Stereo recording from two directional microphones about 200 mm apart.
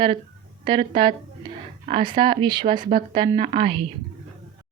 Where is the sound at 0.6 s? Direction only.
25° right (ahead or behind).